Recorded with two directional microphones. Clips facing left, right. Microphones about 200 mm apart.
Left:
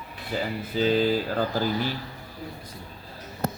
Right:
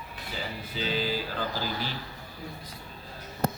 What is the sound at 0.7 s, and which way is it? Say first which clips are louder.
Speech: left 9 dB; 45° left (ahead or behind).